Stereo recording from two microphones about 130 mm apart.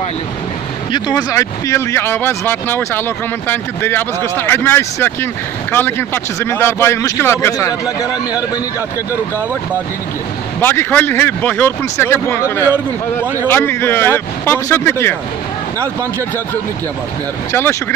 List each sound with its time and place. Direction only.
0.9 s speech: 30° left (ahead or behind)
10.6 s speech: 15° left (ahead or behind)
17.5 s speech: 20° left (ahead or behind)